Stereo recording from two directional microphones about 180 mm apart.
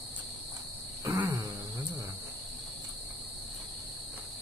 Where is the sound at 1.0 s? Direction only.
15° right (ahead or behind).